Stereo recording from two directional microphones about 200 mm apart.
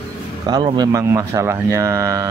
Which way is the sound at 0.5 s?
20° right (ahead or behind).